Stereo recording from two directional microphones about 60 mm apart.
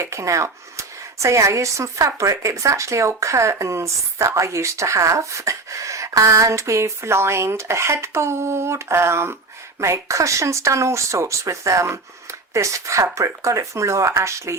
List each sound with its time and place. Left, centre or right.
0.0 s speech: right